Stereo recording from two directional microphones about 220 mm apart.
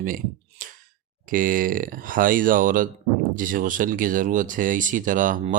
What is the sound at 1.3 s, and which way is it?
Speech, 40° right (ahead or behind).